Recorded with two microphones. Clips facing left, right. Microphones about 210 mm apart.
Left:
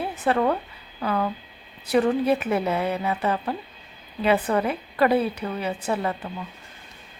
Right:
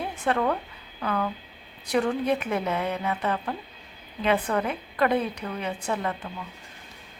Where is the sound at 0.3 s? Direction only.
5° left (ahead or behind).